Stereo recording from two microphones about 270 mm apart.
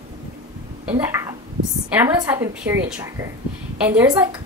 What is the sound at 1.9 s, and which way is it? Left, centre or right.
A woman's voice, centre.